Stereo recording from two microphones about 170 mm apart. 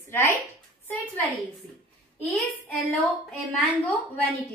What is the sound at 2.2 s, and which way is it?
A woman's voice, 5° left (ahead or behind).